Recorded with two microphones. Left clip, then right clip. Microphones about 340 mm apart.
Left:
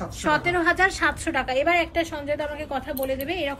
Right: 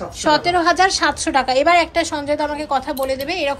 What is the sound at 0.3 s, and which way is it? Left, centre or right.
A woman's voice, centre.